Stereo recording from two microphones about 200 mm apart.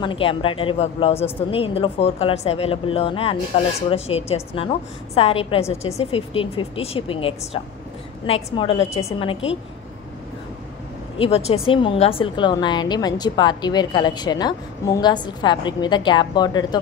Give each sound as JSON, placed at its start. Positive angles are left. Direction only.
{"t": 0.0, "sound": "speech", "side_deg": 25}
{"t": 11.1, "sound": "speech", "side_deg": 30}